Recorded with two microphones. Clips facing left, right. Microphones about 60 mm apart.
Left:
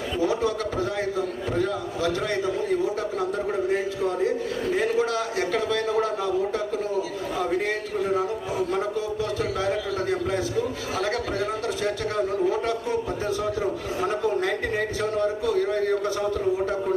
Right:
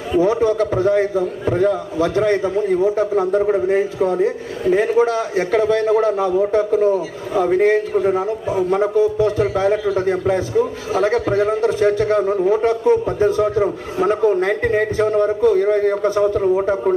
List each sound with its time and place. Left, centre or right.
0.2 s a man's voice: right